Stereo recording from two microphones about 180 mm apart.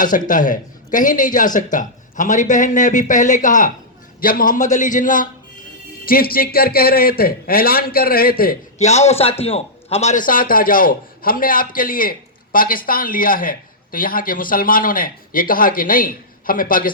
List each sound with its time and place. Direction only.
0.0 s a man's voice: 45° left (ahead or behind)
8.8 s a man's voice: 40° left (ahead or behind)